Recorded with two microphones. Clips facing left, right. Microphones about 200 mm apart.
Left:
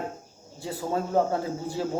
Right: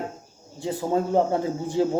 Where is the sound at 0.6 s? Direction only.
20° right (ahead or behind).